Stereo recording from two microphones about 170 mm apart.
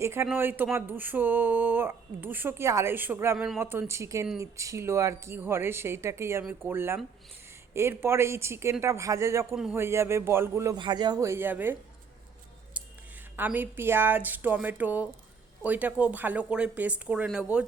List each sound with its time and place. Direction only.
0.0 s speech: 15° right (ahead or behind)
3.3 s speech: centre (ahead or behind)
3.6 s speech: 15° right (ahead or behind)
13.3 s speech: 10° right (ahead or behind)